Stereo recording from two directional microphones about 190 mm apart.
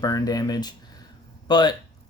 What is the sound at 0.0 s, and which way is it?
Speech, 20° left (ahead or behind).